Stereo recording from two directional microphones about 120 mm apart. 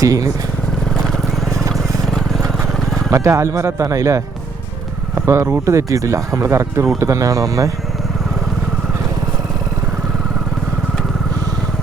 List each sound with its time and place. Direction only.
0.0 s speech: 30° right (ahead or behind)
0.9 s vehicle: 5° left (ahead or behind)
2.7 s a sound: 5° left (ahead or behind)
3.1 s speech: 25° right (ahead or behind)